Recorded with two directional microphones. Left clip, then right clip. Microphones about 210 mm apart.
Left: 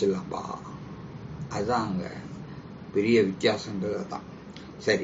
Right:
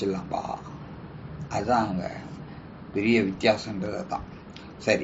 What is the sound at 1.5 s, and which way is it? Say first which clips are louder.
Speech: right 3 dB; 20° right (ahead or behind).